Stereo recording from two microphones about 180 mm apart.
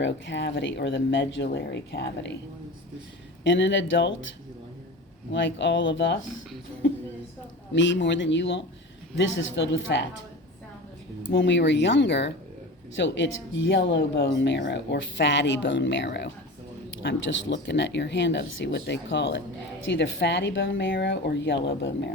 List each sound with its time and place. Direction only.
0.0 s speech: 85° left; by 2.3 s 65° left (ahead or behind)
3.4 s speech: 85° left
5.3 s speech: 80° left
7.7 s speech: 90° left
11.3 s speech: 90° left
13.0 s speech: 90° left
20.7 s speech: 75° left (ahead or behind)